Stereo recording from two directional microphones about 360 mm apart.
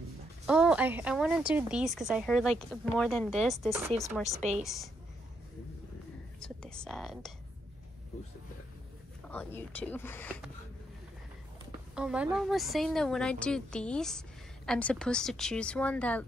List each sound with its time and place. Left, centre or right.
0.5 s a woman's voice: centre
6.4 s speech: centre
9.3 s a woman's voice: centre
11.9 s a woman's voice: centre